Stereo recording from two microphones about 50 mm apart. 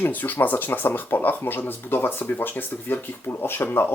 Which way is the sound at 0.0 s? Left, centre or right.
Left.